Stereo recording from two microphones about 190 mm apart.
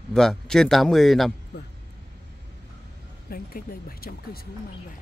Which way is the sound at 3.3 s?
50° left (ahead or behind).